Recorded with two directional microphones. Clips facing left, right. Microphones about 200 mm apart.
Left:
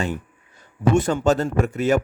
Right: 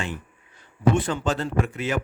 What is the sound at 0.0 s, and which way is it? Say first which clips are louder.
A man's voice: left 6 dB; 45° left (ahead or behind).